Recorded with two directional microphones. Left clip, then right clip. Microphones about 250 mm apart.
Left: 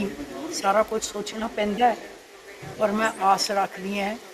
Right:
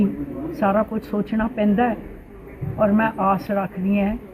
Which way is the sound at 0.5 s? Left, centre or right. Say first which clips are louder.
Right 1 dB; centre.